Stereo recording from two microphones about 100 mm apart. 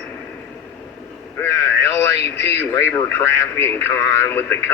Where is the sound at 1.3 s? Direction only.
25° left (ahead or behind).